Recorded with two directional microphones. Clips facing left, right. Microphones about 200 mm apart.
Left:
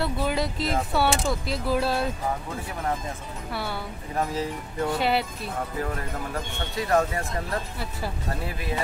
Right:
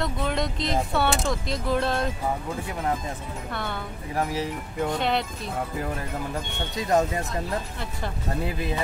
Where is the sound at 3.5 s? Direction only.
5° left (ahead or behind).